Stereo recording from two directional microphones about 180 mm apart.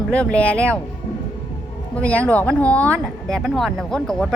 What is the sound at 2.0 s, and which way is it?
Speech, 10° left (ahead or behind).